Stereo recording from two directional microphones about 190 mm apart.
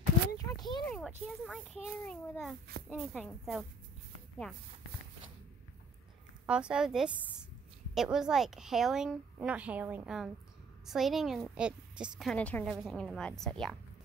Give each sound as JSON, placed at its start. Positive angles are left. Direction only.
{"t": 0.6, "sound": "a sound", "side_deg": 25}
{"t": 0.8, "sound": "a woman's voice", "side_deg": 0}
{"t": 6.4, "sound": "a woman's voice", "side_deg": -5}